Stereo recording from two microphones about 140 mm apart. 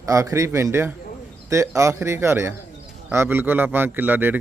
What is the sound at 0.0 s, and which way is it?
A man's voice, 20° right (ahead or behind).